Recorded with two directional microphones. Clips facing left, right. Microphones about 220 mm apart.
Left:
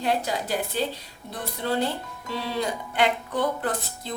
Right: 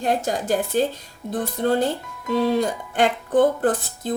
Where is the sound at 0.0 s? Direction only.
45° right (ahead or behind).